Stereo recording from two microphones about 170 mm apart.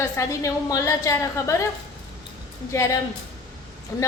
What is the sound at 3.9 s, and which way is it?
Speech, 20° left (ahead or behind).